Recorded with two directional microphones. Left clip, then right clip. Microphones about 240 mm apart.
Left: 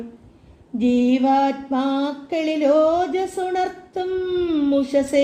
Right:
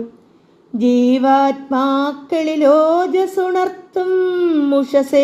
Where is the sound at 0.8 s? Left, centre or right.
Right.